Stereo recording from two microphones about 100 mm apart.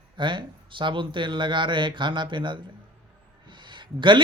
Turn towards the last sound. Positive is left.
turn(degrees=-55)  # may be behind; listen again after turning